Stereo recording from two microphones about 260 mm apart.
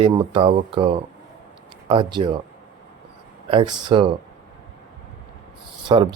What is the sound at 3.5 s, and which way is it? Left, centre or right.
Speech, centre.